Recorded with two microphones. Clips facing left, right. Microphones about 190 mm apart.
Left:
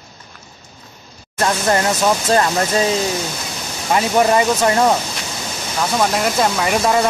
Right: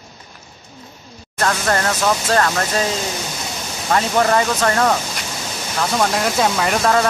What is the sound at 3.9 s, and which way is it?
Speech, 10° left (ahead or behind).